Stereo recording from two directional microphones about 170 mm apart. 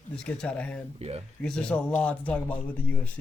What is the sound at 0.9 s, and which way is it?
Speech, 35° right (ahead or behind).